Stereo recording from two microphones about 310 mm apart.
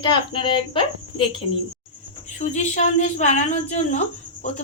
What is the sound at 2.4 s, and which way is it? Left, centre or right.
A woman's voice, left.